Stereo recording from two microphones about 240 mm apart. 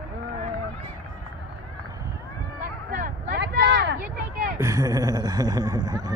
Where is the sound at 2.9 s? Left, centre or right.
Right.